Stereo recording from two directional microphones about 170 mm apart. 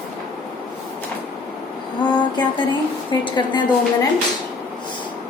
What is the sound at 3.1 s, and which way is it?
Speech, 30° left (ahead or behind).